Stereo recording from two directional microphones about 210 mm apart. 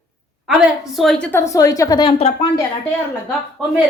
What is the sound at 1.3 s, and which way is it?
Speech, 15° left (ahead or behind).